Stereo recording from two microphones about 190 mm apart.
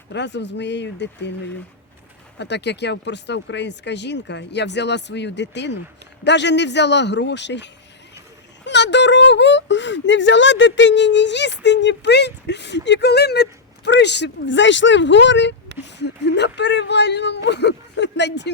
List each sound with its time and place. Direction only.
0.1 s speech: 65° left (ahead or behind)
2.4 s speech: 65° left (ahead or behind)